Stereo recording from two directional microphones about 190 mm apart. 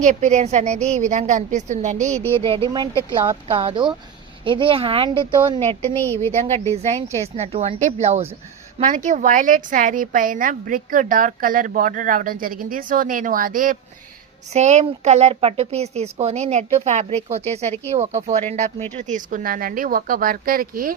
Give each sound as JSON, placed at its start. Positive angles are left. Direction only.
{"t": 0.0, "sound": "a woman's voice", "side_deg": -40}
{"t": 2.1, "sound": "a woman's voice", "side_deg": 10}
{"t": 2.6, "sound": "a woman's voice", "side_deg": -20}
{"t": 5.9, "sound": "a woman's voice", "side_deg": 10}
{"t": 6.3, "sound": "a woman's voice", "side_deg": -35}